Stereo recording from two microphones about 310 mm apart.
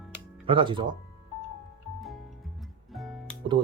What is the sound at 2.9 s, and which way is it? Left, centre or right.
Music, centre.